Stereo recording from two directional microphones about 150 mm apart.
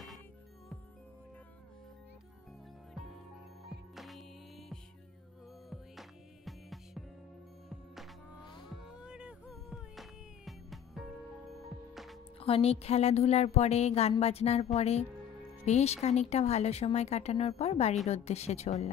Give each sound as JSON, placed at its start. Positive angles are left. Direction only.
{"t": 3.9, "sound": "music", "side_deg": 0}
{"t": 12.4, "sound": "speech", "side_deg": 40}